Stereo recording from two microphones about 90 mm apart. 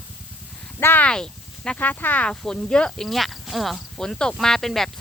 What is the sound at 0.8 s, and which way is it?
Speech, 20° left (ahead or behind).